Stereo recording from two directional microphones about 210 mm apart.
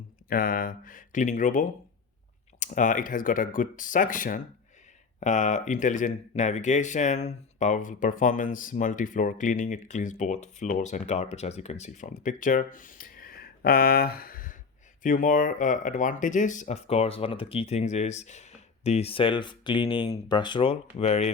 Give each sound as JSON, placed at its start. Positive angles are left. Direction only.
{"t": 0.3, "sound": "speech", "side_deg": 45}